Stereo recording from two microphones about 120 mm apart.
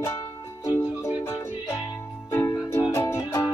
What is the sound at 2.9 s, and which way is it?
Music, 25° left (ahead or behind).